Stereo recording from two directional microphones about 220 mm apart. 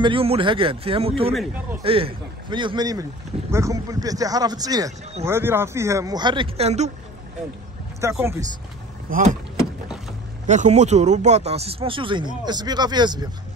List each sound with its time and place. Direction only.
0.0 s a man's voice: 25° right (ahead or behind)
1.3 s speech: 5° right (ahead or behind)
1.8 s a man's voice: 25° right (ahead or behind)
8.0 s speech: 10° right (ahead or behind)
9.1 s speech: 40° right (ahead or behind)
10.4 s a man's voice: 35° right (ahead or behind)